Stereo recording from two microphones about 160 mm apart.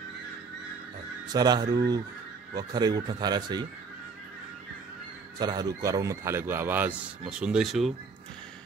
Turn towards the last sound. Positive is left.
turn(degrees=0)  # may be behind; listen again after turning